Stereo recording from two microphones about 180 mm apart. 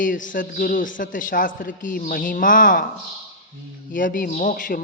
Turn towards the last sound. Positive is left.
turn(degrees=50)  # may be behind; listen again after turning